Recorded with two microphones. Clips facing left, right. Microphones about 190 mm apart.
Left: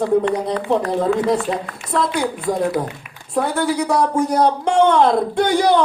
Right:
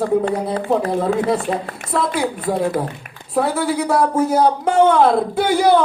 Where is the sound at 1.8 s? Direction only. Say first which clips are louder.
Even; 45° right (ahead or behind).